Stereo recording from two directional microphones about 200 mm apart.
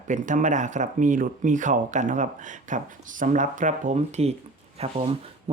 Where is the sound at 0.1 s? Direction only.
40° right (ahead or behind).